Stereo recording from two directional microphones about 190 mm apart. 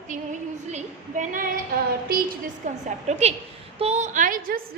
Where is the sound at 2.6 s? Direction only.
40° right (ahead or behind).